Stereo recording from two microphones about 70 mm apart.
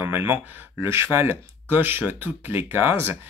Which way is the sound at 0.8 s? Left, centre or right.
Right.